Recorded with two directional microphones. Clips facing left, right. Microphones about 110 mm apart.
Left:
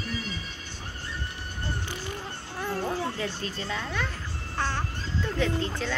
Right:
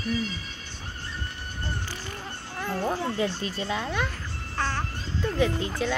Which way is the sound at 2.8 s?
20° right (ahead or behind).